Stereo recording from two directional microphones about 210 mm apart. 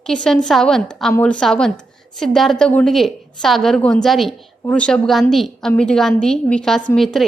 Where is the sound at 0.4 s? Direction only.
Centre (ahead or behind).